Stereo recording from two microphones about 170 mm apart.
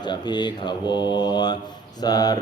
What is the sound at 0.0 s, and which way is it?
Mantra, 25° left (ahead or behind).